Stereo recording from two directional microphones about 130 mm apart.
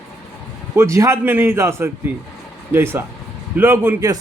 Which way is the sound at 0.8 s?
20° right (ahead or behind).